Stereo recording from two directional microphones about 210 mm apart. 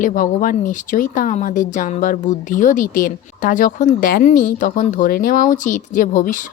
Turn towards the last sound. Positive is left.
turn(degrees=40)  # may be behind; listen again after turning